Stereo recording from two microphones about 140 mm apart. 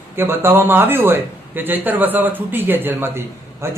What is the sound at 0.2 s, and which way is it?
A man's voice, 15° right (ahead or behind).